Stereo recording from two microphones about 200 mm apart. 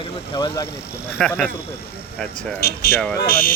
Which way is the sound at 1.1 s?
5° left (ahead or behind).